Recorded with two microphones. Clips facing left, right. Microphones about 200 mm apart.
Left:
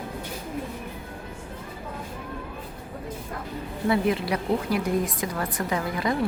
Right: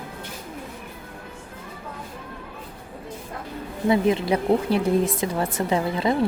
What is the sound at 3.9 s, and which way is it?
A woman's voice, 25° right (ahead or behind).